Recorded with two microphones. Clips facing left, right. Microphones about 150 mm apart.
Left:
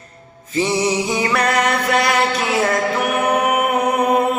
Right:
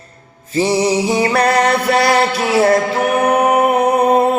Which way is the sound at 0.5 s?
35° right (ahead or behind).